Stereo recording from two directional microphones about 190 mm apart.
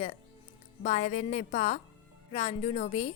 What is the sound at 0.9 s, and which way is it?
Speech, 35° left (ahead or behind).